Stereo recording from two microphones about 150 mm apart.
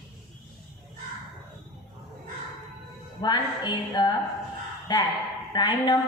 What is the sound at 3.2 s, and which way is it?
A woman's voice, 30° left (ahead or behind).